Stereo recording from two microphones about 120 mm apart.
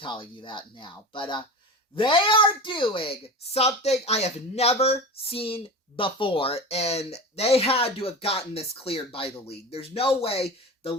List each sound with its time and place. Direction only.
0.0 s speech: 45° left (ahead or behind)